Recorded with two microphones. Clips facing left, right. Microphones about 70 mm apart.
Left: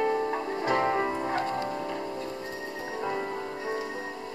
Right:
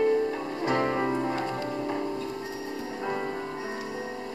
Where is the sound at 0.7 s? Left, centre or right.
Centre.